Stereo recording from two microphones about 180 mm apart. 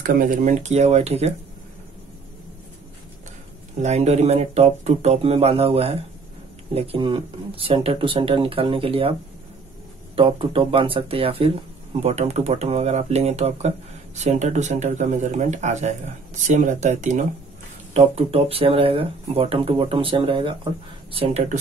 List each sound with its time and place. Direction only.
0.0 s speech: 50° right (ahead or behind)
3.8 s speech: 35° right (ahead or behind)
10.1 s speech: 30° right (ahead or behind)